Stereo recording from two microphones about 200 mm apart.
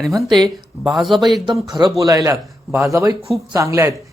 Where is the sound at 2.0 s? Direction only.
15° right (ahead or behind).